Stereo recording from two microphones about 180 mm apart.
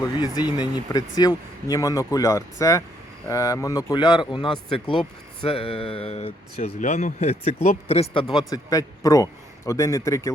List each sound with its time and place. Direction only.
0.0 s a man's voice: 20° left (ahead or behind)